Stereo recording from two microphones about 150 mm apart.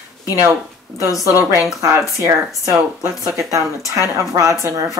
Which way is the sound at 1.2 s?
20° right (ahead or behind).